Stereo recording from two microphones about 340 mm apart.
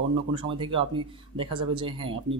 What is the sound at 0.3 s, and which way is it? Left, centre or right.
Speech, centre.